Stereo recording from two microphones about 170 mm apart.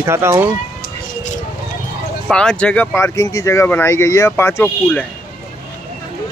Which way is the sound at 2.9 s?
15° left (ahead or behind).